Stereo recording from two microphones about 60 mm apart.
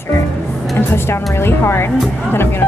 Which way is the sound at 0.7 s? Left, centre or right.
Left.